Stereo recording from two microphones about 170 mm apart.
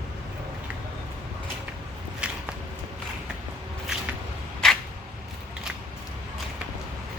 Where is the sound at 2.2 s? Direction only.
5° right (ahead or behind).